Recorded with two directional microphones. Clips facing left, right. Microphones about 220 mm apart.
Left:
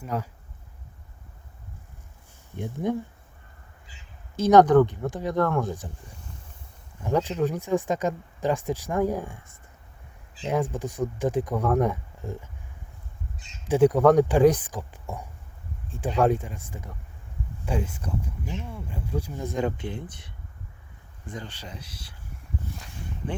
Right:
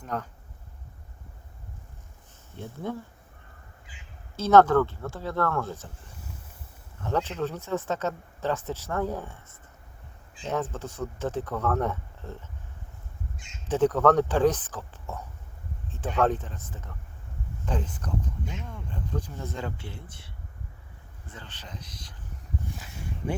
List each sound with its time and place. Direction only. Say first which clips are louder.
0.0 s speech: left 3 dB; 10° left (ahead or behind)
2.6 s speech: left 6 dB; 15° left (ahead or behind)
4.4 s speech: left 3 dB; 15° left (ahead or behind)
7.0 s speech: left 4 dB; 10° left (ahead or behind)
13.7 s speech: left 4 dB; 10° left (ahead or behind)